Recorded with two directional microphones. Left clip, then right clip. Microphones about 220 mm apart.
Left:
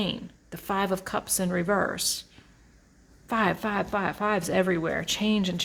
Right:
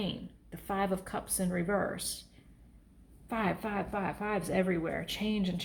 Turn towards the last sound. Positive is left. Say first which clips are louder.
# left 8 dB
turn(degrees=35)  # may be behind; listen again after turning